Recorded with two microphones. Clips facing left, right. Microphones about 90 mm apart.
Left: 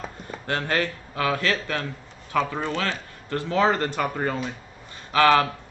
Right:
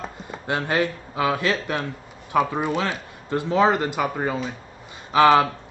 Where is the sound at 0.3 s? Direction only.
15° right (ahead or behind).